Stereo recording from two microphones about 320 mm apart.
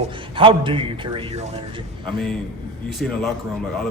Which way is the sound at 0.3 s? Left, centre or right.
Centre.